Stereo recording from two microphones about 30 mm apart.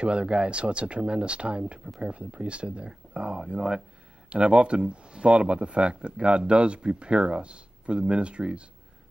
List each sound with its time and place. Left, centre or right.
0.0 s speech: right